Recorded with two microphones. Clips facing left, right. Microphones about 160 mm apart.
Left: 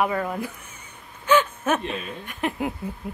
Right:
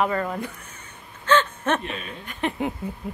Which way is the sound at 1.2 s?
10° left (ahead or behind).